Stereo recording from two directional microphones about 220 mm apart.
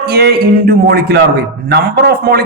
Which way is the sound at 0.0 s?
45° right (ahead or behind).